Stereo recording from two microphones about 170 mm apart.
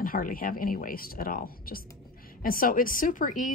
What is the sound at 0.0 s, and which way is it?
Speech, 55° left (ahead or behind).